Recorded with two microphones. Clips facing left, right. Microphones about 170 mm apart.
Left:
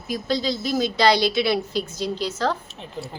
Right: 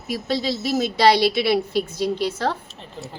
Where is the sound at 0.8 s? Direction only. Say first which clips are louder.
Right 2 dB; 55° right (ahead or behind).